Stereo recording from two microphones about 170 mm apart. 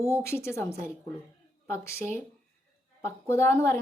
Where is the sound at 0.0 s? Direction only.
15° left (ahead or behind).